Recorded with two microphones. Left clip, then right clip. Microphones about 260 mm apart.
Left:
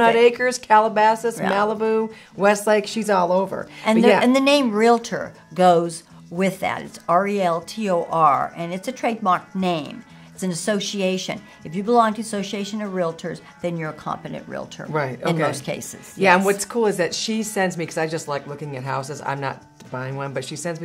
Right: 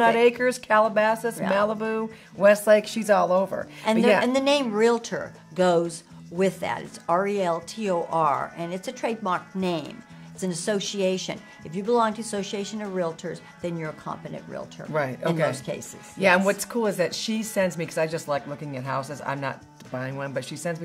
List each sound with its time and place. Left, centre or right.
0.0 s speech: left
3.8 s speech: right
14.9 s speech: left
15.5 s speech: centre
16.2 s speech: left